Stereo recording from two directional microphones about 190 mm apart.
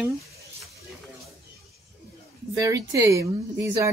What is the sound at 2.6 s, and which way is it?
Speech, 15° right (ahead or behind).